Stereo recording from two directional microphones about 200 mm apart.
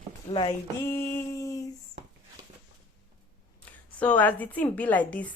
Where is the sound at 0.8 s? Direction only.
15° left (ahead or behind).